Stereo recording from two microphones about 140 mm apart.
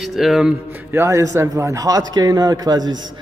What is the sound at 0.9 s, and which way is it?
A man's voice, 20° right (ahead or behind).